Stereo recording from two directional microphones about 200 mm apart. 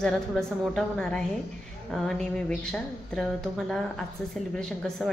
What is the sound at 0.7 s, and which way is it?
A woman's voice, 5° left (ahead or behind).